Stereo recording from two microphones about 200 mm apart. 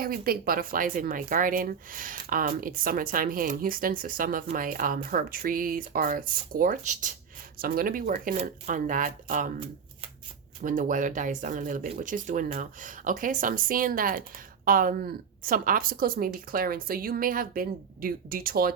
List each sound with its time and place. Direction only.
0.0 s speech: 45° right (ahead or behind)
10.6 s speech: 40° right (ahead or behind)